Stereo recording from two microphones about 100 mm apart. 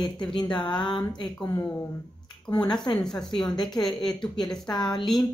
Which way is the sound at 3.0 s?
5° left (ahead or behind).